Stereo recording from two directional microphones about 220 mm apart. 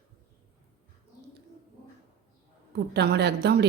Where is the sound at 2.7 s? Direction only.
50° right (ahead or behind).